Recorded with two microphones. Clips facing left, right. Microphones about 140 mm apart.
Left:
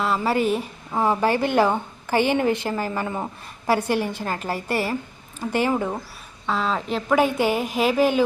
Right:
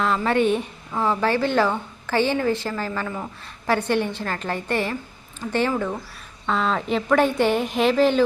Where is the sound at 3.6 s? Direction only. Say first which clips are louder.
Even; 10° left (ahead or behind).